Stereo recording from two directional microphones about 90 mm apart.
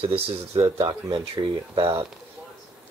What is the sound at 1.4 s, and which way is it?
Speech, 45° right (ahead or behind).